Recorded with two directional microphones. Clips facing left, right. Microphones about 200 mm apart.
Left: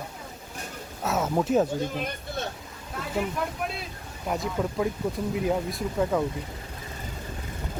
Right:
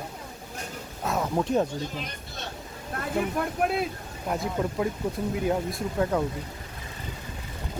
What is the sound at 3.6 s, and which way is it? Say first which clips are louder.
Speech: right 8 dB; 55° right (ahead or behind).